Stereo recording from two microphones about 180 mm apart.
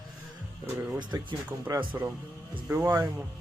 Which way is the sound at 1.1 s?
20° right (ahead or behind).